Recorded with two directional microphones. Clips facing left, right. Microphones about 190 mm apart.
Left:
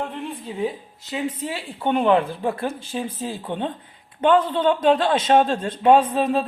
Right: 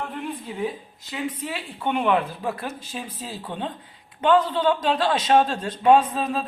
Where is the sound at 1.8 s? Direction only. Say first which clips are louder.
Left 4 dB; 30° left (ahead or behind).